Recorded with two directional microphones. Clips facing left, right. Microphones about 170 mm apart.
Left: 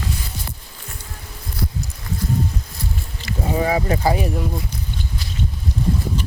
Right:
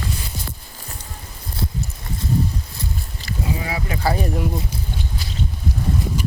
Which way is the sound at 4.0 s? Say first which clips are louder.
Left 2 dB; 15° left (ahead or behind).